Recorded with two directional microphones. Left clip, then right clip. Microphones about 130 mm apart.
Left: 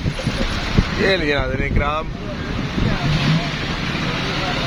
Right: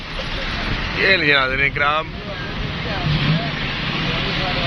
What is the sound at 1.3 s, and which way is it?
Speech, 25° left (ahead or behind).